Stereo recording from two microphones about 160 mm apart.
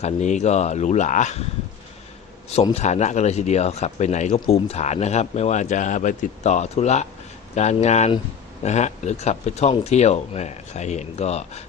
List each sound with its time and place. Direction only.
0.0 s speech: 45° left (ahead or behind)
2.7 s speech: 45° left (ahead or behind)